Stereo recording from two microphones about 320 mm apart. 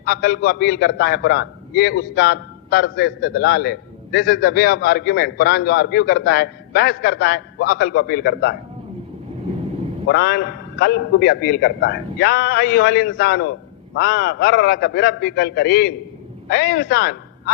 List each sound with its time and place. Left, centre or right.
0.0 s a man's voice: left
10.1 s a man's voice: left